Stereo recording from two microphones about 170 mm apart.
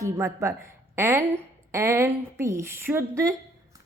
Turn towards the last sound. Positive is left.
turn(degrees=-15)  # may be behind; listen again after turning